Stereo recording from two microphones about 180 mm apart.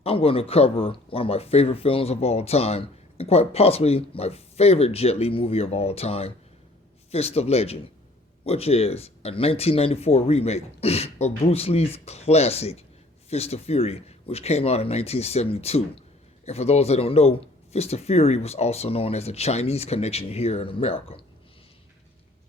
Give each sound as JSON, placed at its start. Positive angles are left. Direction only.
{"t": 0.0, "sound": "speech", "side_deg": 30}